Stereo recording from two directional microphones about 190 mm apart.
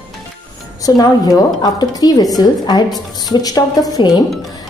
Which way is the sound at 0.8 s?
20° left (ahead or behind).